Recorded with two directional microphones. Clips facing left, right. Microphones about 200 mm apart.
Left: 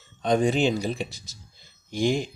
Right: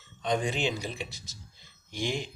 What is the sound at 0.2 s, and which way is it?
Speech, 45° left (ahead or behind).